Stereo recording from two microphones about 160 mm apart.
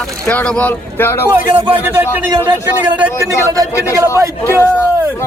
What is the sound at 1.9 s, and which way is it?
A man's voice, 15° right (ahead or behind).